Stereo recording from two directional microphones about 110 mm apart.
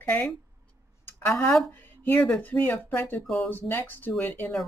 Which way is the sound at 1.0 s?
20° left (ahead or behind).